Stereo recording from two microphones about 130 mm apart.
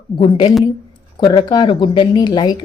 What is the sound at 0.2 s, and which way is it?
Speech, 40° left (ahead or behind).